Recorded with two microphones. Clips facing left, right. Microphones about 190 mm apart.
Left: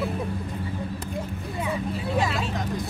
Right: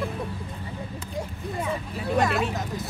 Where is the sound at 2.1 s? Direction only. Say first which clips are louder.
Right 4 dB; 55° right (ahead or behind).